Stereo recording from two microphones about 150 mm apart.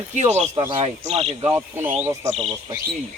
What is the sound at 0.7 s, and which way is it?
Speech, 45° right (ahead or behind).